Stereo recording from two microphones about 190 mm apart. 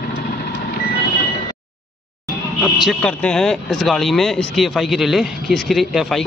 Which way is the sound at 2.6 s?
Centre (ahead or behind).